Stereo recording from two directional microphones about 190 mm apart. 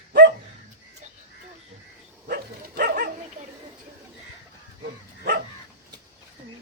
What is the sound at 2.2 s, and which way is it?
Dog, 55° right (ahead or behind).